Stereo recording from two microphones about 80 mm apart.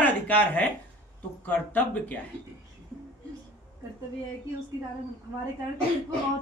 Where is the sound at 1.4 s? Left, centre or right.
Left.